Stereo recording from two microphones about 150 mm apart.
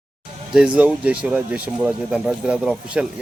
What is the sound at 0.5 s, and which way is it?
Speech, 5° right (ahead or behind).